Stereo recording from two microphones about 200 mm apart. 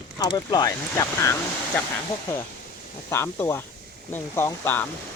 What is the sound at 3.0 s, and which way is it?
Speech, 10° left (ahead or behind).